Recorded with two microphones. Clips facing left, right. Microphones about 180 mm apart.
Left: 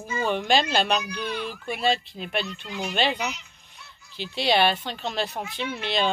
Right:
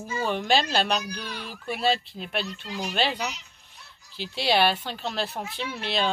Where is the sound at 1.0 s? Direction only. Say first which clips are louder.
Left 5 dB; 35° right (ahead or behind).